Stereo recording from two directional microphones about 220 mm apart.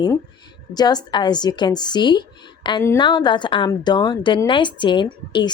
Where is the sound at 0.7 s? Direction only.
20° left (ahead or behind).